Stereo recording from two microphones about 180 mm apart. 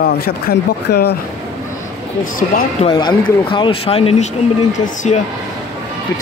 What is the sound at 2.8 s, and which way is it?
Speech, 25° left (ahead or behind).